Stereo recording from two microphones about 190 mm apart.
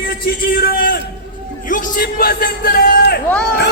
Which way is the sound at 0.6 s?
55° left (ahead or behind).